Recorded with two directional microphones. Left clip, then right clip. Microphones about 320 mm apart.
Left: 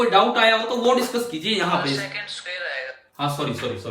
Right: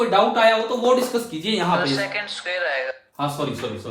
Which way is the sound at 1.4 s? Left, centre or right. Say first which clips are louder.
Right 1 dB; centre.